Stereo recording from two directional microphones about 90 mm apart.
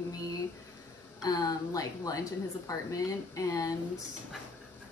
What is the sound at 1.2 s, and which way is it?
A woman's voice, 45° left (ahead or behind).